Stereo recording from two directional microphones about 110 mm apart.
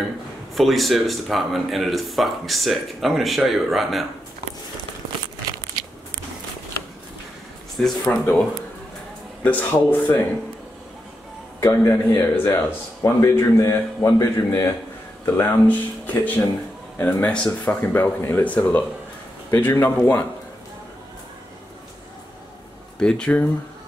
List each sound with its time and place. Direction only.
0.6 s speech: centre (ahead or behind)
7.8 s speech: 5° left (ahead or behind)
11.6 s a man's voice: 20° left (ahead or behind)
22.9 s speech: 5° left (ahead or behind)